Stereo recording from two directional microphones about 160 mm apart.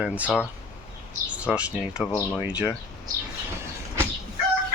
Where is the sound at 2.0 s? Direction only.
15° left (ahead or behind).